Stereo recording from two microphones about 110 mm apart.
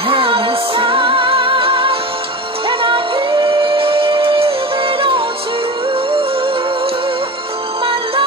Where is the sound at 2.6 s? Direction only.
50° right (ahead or behind).